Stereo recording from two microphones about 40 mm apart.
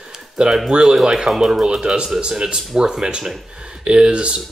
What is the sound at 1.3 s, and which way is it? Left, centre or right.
Speech, centre.